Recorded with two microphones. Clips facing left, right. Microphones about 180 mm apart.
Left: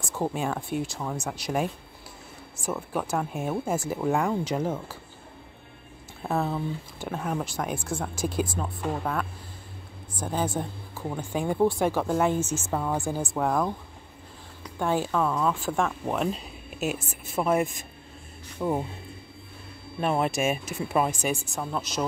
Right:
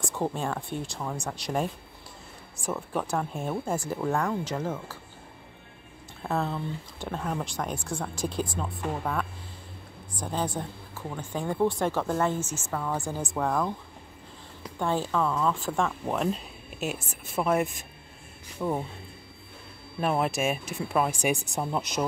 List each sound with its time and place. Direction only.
0.0 s speech: 5° left (ahead or behind)
6.2 s speech: 10° left (ahead or behind)
14.8 s speech: 5° left (ahead or behind)
20.0 s speech: centre (ahead or behind)
21.1 s speech: 15° right (ahead or behind)